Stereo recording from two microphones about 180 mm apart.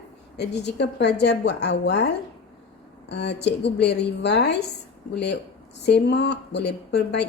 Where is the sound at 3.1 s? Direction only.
70° left (ahead or behind).